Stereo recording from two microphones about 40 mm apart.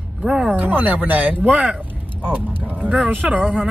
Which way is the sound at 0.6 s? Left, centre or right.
Right.